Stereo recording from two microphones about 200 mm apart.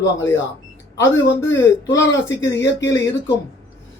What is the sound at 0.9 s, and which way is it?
Speech, 15° left (ahead or behind).